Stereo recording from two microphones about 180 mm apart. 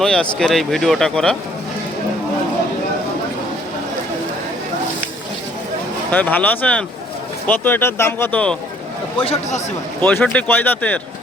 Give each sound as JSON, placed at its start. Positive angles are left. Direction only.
{"t": 0.0, "sound": "speech", "side_deg": 5}
{"t": 6.1, "sound": "speech", "side_deg": 10}
{"t": 9.2, "sound": "a man's voice", "side_deg": 35}
{"t": 10.0, "sound": "speech", "side_deg": 10}